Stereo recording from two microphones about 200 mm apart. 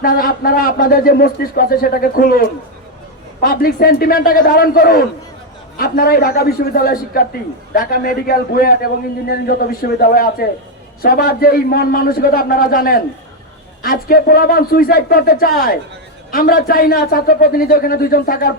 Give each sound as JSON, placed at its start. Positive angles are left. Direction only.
{"t": 0.0, "sound": "a man's voice", "side_deg": 45}